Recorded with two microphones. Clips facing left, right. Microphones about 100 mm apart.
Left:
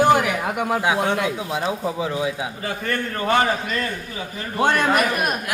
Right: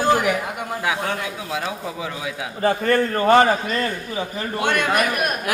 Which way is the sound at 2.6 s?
35° right (ahead or behind).